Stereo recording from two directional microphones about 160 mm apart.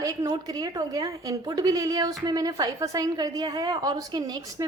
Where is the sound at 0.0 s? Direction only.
20° right (ahead or behind).